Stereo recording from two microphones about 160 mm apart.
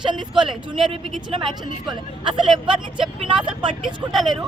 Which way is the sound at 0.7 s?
30° right (ahead or behind).